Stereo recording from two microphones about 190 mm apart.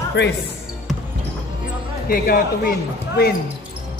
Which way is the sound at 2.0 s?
50° left (ahead or behind).